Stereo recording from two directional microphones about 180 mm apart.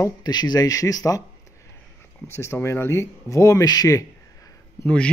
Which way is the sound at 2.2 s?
15° left (ahead or behind).